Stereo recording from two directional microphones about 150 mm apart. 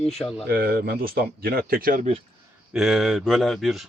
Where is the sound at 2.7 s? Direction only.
Centre (ahead or behind).